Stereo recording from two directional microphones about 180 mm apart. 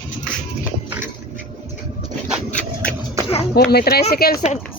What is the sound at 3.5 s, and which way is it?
Speech, 60° left (ahead or behind).